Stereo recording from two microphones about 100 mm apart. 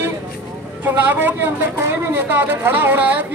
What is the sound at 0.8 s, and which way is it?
A woman's voice, 20° right (ahead or behind).